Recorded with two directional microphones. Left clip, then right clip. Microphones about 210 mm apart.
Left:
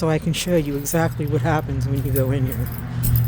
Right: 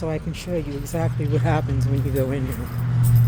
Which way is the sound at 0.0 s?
35° left (ahead or behind).